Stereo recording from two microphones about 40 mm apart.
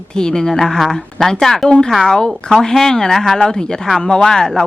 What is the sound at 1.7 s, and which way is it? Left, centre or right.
Speech, left.